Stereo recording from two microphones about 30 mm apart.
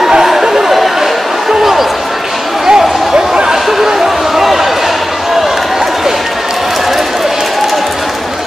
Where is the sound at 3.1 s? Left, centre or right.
Right.